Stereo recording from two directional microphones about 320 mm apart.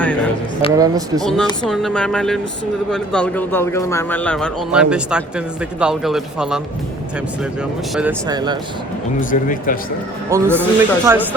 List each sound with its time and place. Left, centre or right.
0.7 s a man's voice: centre
1.2 s a man's voice: centre
7.9 s a man's voice: centre
9.3 s speech: left
10.2 s a man's voice: centre